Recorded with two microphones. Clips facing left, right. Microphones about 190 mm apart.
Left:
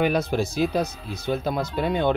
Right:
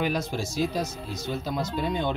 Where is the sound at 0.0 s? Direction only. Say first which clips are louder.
Left 6 dB; 60° left (ahead or behind).